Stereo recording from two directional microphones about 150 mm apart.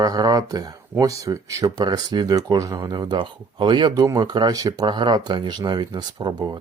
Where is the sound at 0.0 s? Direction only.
25° right (ahead or behind).